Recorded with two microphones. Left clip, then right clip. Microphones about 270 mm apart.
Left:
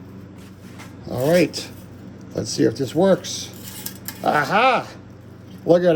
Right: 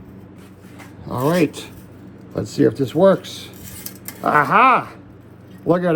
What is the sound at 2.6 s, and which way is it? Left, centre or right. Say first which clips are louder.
Speech: right 4 dB; centre.